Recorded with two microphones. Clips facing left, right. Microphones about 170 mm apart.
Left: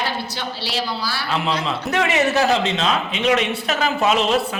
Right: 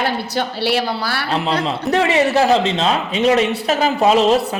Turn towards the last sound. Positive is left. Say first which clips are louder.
# right 5 dB
turn(degrees=-35)  # may be behind; listen again after turning